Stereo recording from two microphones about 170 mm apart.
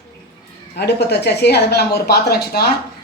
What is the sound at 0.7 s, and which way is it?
Speech, 75° left (ahead or behind).